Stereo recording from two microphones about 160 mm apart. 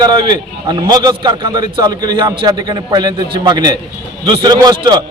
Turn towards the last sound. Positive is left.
turn(degrees=-25)  # may be behind; listen again after turning